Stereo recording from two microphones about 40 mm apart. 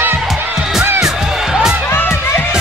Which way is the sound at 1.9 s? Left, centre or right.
Left.